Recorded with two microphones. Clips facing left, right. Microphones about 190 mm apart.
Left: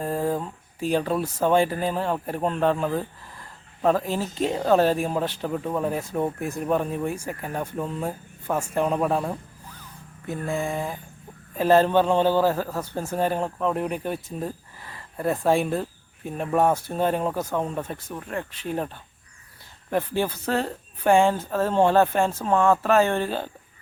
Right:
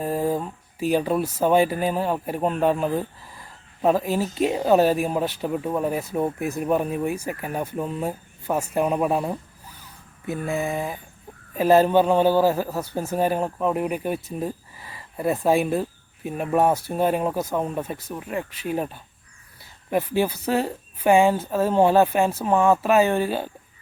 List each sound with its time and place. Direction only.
0.0 s speech: 10° right (ahead or behind)
19.9 s speech: 10° right (ahead or behind)